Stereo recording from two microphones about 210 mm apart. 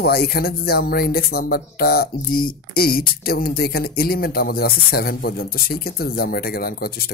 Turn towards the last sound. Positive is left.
turn(degrees=45)  # may be behind; listen again after turning